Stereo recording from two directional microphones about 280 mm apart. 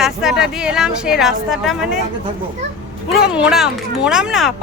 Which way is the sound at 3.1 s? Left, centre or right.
Centre.